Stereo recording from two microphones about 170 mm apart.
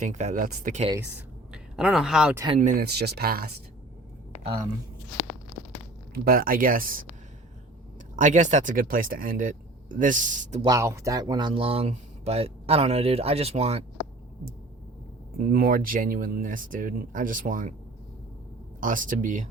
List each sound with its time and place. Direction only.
0.0 s speech: 45° right (ahead or behind)
1.5 s speech: 5° right (ahead or behind)
2.6 s speech: 50° right (ahead or behind)
2.8 s speech: 70° right (ahead or behind)
6.1 s speech: 60° right (ahead or behind)
8.1 s speech: 45° right (ahead or behind)
10.6 s speech: 20° right (ahead or behind); by 13.8 s 35° right (ahead or behind)
15.4 s speech: 55° right (ahead or behind)
18.8 s speech: 50° right (ahead or behind)